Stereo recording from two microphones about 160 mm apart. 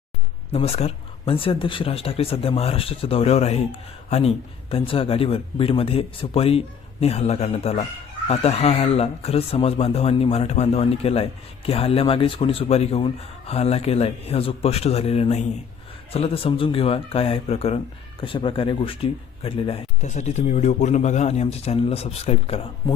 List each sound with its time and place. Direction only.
0.5 s speech: 40° left (ahead or behind)